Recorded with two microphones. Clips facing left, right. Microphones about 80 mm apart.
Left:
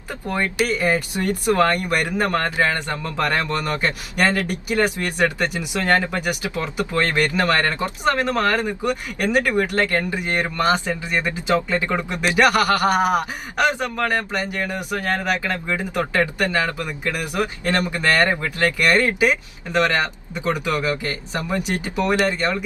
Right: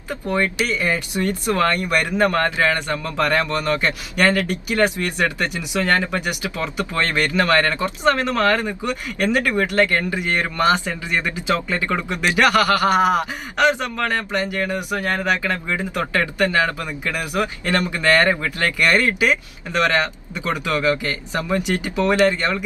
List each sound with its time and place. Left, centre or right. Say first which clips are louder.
0.4 s a man's voice: left 2 dB; left
14.9 s speech: right 1 dB; right
15.4 s a man's voice: right 1 dB; left
17.1 s speech: right 3 dB; right
17.4 s a man's voice: right 1 dB; left